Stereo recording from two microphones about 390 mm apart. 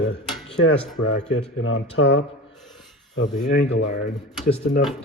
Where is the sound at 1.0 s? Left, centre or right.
Left.